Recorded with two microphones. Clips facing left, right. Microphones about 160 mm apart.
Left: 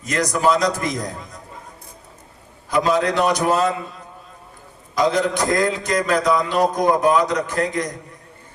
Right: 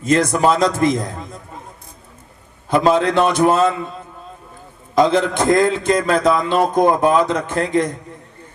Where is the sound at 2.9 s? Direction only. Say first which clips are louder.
Right 3 dB; 25° right (ahead or behind).